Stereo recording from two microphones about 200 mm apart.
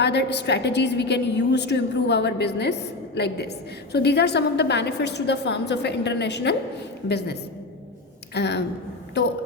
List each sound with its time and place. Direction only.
0.0 s a woman's voice: 60° left (ahead or behind)
8.3 s a woman's voice: 55° left (ahead or behind)